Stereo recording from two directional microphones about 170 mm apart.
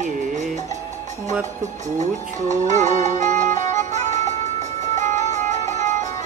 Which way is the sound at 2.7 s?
45° right (ahead or behind).